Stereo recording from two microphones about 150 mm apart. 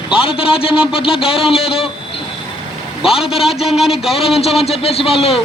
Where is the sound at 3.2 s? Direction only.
Centre (ahead or behind).